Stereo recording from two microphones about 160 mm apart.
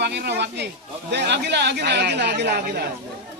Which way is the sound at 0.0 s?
90° right.